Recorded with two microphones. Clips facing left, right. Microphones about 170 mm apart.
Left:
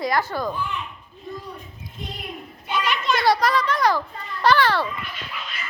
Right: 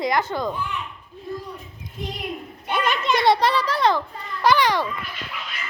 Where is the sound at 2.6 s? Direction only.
55° right (ahead or behind).